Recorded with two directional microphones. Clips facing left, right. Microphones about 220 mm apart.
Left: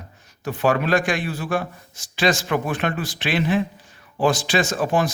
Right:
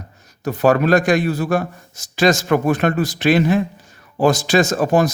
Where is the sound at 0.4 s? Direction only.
40° right (ahead or behind).